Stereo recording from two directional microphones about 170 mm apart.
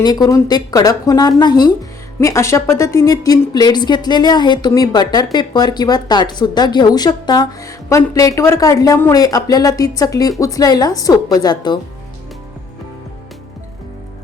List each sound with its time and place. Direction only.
0.0 s a woman's voice: 25° left (ahead or behind)